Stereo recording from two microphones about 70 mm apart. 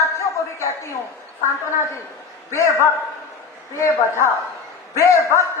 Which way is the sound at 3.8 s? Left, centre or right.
Left.